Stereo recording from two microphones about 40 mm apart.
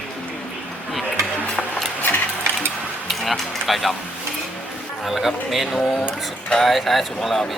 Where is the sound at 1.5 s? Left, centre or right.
Centre.